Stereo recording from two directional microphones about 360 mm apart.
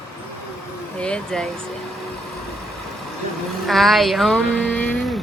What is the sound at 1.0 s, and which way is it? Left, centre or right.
Speech, centre.